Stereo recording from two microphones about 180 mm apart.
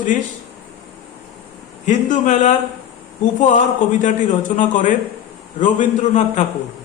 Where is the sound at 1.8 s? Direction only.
45° left (ahead or behind).